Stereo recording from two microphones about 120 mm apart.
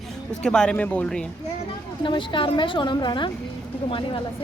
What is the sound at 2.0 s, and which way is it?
A woman's voice, 45° left (ahead or behind).